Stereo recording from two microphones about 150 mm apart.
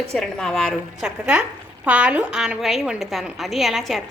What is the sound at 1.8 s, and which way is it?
A woman's voice, 10° right (ahead or behind).